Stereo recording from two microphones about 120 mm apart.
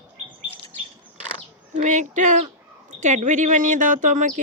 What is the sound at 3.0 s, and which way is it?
A woman's voice, 90° right.